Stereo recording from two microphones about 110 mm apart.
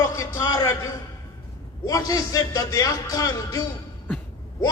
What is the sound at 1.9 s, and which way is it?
A man's voice, 35° left (ahead or behind).